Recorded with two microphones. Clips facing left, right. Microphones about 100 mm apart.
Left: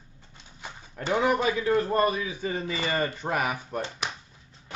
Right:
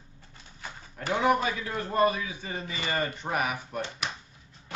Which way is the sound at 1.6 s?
30° left (ahead or behind).